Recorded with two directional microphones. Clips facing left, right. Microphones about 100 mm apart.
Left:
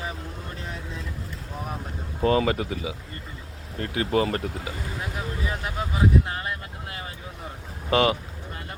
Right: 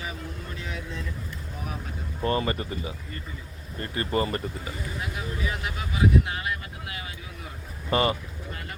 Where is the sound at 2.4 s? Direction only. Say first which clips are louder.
Left 4 dB; 90° left.